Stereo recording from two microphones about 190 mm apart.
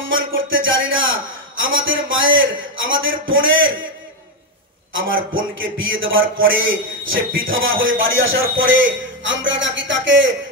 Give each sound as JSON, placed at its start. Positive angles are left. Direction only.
{"t": 0.1, "sound": "a man's voice", "side_deg": -90}
{"t": 4.9, "sound": "a man's voice", "side_deg": -90}